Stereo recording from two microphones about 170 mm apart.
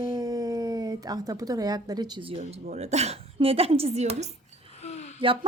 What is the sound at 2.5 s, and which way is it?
A woman's voice, 40° right (ahead or behind).